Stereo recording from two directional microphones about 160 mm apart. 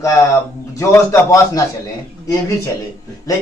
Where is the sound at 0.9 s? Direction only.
20° left (ahead or behind).